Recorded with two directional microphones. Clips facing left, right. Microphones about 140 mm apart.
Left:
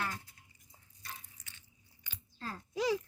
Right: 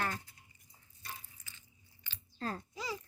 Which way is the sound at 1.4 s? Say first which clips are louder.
Even; 70° left (ahead or behind).